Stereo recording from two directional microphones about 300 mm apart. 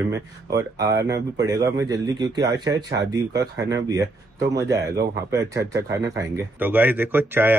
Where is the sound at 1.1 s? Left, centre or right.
Right.